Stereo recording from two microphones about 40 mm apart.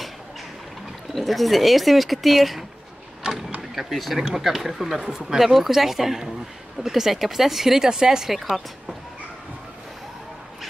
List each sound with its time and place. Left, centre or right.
1.1 s speech: centre
3.7 s speech: centre